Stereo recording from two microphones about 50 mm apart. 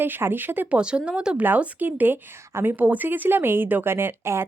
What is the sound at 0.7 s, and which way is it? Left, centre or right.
Speech, right.